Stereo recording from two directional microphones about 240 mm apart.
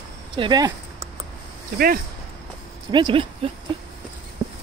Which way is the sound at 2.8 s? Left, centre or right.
Centre.